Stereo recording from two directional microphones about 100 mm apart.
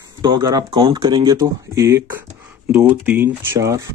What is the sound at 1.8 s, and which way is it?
Speech, 30° right (ahead or behind).